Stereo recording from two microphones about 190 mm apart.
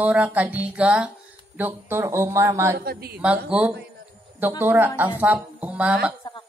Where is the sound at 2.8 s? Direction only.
55° right (ahead or behind).